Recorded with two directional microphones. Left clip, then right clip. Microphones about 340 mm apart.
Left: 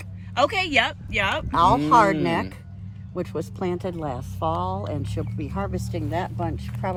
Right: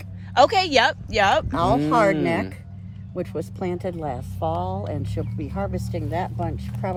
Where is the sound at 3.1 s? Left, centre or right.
Centre.